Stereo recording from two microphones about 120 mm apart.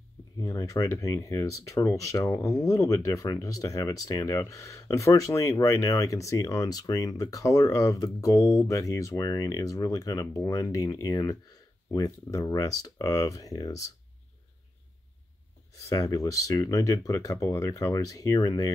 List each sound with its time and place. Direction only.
0.4 s speech: 25° left (ahead or behind)
15.7 s speech: 30° left (ahead or behind)